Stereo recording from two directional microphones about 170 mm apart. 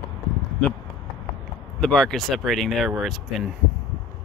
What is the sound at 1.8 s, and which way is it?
Speech, 5° left (ahead or behind).